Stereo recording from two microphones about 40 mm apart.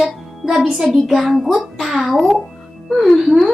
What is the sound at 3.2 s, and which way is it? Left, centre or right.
Speech, centre.